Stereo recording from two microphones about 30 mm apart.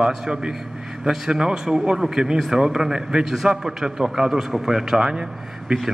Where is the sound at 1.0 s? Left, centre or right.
Centre.